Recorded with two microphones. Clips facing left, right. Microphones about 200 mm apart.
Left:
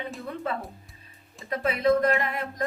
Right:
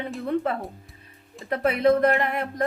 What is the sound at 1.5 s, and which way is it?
Speech, 60° right (ahead or behind).